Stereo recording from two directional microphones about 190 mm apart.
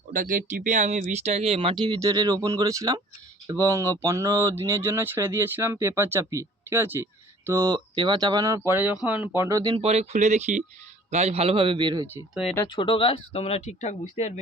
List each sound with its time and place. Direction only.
0.1 s speech: 45° right (ahead or behind); by 9.7 s 15° right (ahead or behind)
9.7 s speech: 35° right (ahead or behind)
12.1 s speech: centre (ahead or behind)
12.6 s speech: 25° left (ahead or behind)